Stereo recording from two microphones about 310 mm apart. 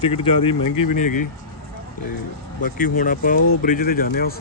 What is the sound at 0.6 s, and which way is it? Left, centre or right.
Speech, left.